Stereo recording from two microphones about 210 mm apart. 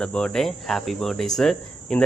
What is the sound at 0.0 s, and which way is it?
Speech, 5° left (ahead or behind).